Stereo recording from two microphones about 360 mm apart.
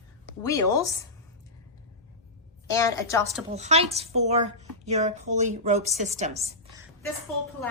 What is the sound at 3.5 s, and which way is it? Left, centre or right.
A woman's voice, centre.